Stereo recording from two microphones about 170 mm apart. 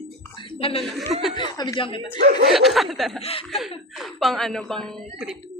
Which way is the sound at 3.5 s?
Centre (ahead or behind).